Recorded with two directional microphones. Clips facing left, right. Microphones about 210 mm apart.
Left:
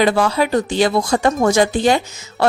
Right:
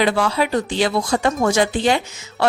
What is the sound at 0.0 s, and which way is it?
A woman's voice, 40° left (ahead or behind).